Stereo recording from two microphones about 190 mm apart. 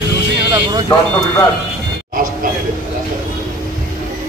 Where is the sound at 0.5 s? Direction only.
20° right (ahead or behind).